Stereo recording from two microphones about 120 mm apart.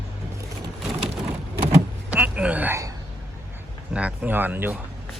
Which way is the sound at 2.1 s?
10° right (ahead or behind).